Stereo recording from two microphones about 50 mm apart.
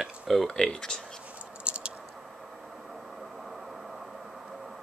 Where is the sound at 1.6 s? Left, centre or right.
Right.